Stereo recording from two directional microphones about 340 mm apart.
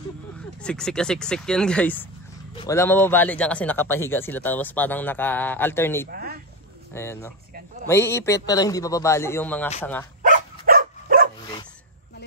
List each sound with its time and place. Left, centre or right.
0.6 s speech: centre
6.1 s a sound: right
6.9 s a man's voice: centre
10.2 s dog: right